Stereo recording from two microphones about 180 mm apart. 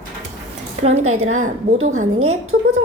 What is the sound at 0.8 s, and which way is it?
A woman's voice, 35° right (ahead or behind).